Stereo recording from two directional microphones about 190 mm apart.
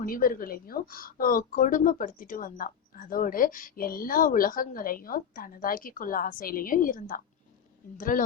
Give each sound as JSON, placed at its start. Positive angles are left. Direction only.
{"t": 0.0, "sound": "speech", "side_deg": 45}